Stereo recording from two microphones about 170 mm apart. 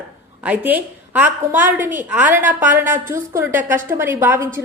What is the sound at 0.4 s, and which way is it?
A woman's voice, 10° right (ahead or behind).